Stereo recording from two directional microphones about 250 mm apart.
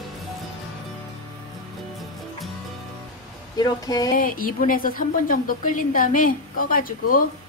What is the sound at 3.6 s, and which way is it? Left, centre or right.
Speech, centre.